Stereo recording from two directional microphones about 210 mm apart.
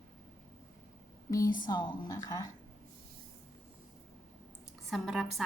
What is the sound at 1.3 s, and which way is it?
A woman's voice, 15° left (ahead or behind).